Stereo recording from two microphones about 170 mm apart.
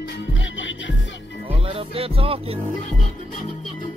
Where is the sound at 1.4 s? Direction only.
35° right (ahead or behind).